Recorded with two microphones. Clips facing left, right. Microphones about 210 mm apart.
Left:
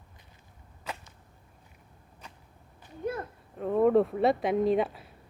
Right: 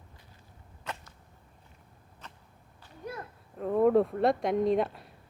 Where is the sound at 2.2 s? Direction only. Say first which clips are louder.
Even; 10° left (ahead or behind).